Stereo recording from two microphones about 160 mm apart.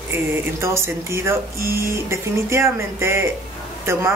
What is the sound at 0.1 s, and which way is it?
A woman's voice, 15° right (ahead or behind).